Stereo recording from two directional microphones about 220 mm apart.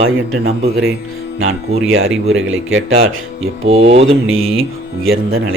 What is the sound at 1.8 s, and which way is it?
Speech, 65° right (ahead or behind).